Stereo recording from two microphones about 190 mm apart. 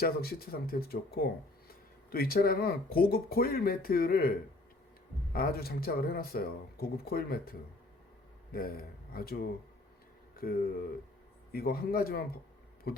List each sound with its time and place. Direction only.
0.0 s speech: 55° left (ahead or behind)
8.5 s speech: 50° left (ahead or behind)